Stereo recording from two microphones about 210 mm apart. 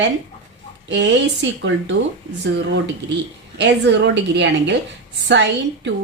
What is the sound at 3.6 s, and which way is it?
A woman's voice, 55° right (ahead or behind).